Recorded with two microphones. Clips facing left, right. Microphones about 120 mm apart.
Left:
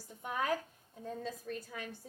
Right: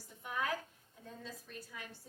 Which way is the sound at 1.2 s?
55° left (ahead or behind).